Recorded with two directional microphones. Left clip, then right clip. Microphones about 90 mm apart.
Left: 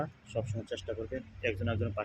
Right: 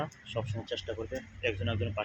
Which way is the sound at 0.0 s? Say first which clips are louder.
Even; 35° left (ahead or behind).